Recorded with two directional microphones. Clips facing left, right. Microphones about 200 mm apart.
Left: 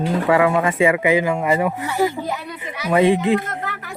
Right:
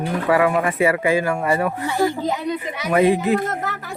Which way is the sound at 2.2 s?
20° right (ahead or behind).